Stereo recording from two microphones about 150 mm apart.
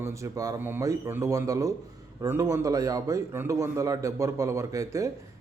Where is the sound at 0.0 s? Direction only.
20° right (ahead or behind).